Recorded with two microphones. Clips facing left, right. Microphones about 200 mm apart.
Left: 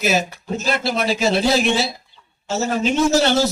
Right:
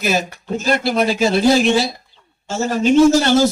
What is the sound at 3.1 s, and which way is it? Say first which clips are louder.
Speech: right 2 dB; 50° right (ahead or behind).